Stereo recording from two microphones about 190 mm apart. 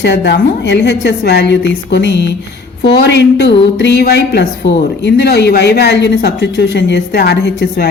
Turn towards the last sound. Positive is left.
turn(degrees=60)  # may be behind; listen again after turning